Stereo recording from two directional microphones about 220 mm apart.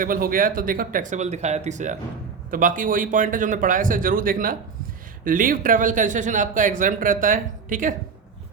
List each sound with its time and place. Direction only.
0.0 s speech: 40° right (ahead or behind)